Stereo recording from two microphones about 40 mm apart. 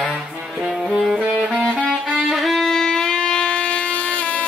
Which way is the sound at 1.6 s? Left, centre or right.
Right.